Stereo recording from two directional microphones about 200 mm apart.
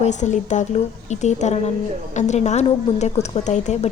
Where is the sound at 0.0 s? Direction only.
35° left (ahead or behind).